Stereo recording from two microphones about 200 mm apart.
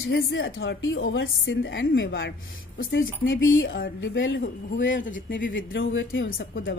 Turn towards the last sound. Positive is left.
turn(degrees=70)  # may be behind; listen again after turning